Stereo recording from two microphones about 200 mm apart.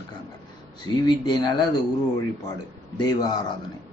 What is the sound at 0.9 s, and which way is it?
Speech, 90° left.